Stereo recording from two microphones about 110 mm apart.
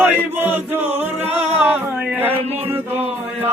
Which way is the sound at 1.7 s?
15° right (ahead or behind).